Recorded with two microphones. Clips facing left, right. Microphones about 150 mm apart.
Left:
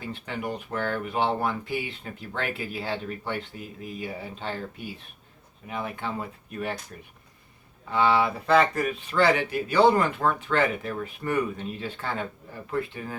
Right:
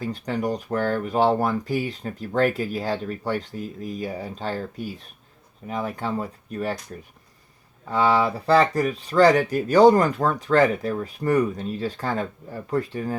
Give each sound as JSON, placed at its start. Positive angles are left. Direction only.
{"t": 0.0, "sound": "speech", "side_deg": -40}
{"t": 7.9, "sound": "speech", "side_deg": -40}